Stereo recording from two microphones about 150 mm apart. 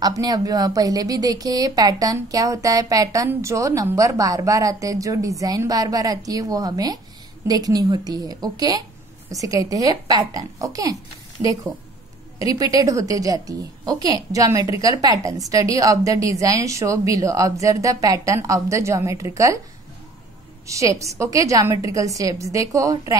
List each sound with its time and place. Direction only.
0.0 s a woman's voice: 25° right (ahead or behind)
11.4 s a woman's voice: 45° right (ahead or behind)
12.4 s a woman's voice: 25° right (ahead or behind)
20.6 s a woman's voice: 20° right (ahead or behind)